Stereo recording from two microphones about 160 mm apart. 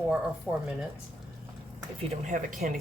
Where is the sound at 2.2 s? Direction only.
55° right (ahead or behind).